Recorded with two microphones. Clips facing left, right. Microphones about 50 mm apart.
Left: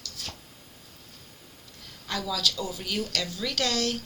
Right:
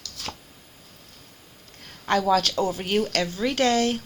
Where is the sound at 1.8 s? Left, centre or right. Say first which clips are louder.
Right 10 dB; right.